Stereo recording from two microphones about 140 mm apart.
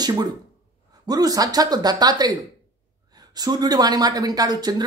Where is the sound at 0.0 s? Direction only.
30° right (ahead or behind).